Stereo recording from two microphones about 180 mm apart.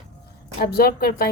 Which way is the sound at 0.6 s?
60° left (ahead or behind).